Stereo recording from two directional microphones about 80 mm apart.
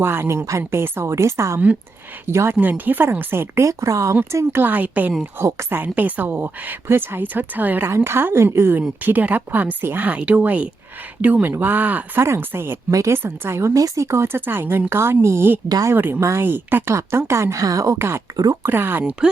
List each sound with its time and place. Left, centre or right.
0.0 s speech: right
3.7 s speech: right
5.5 s speech: right
5.8 s speech: right
7.9 s speech: right
12.2 s speech: right
12.9 s speech: right
13.1 s speech: right
17.9 s speech: right